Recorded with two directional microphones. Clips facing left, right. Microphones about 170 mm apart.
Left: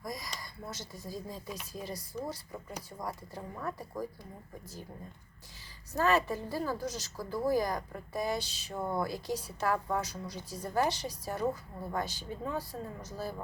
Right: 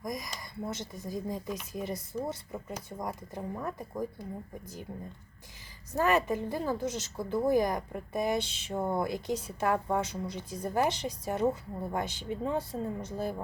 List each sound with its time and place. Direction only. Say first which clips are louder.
0.0 s a woman's voice: right 3 dB; 20° right (ahead or behind)
6.0 s a woman's voice: right 2 dB; 15° right (ahead or behind)